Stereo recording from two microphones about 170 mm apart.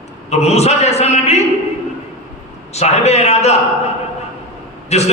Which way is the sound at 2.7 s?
40° left (ahead or behind).